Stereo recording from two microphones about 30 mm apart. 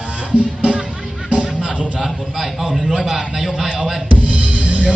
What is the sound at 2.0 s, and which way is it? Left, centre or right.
A man's voice, centre.